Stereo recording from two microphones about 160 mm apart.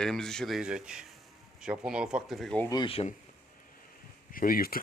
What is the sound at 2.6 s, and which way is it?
Speech, 30° left (ahead or behind).